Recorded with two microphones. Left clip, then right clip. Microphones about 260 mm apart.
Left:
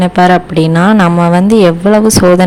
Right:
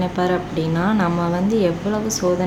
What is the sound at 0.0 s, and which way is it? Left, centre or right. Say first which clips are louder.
Speech: left 13 dB; left.